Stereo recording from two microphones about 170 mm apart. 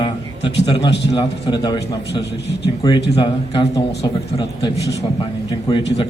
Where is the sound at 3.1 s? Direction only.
35° left (ahead or behind).